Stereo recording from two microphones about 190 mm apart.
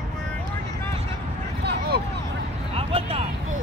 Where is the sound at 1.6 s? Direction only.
55° right (ahead or behind).